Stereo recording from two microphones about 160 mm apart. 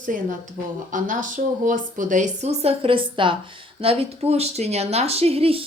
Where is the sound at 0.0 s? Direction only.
55° right (ahead or behind).